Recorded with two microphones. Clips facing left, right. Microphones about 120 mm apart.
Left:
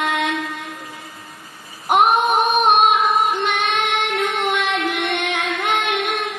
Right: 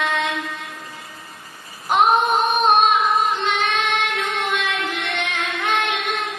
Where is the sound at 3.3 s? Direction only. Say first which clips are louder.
Left 1 dB; 60° left (ahead or behind).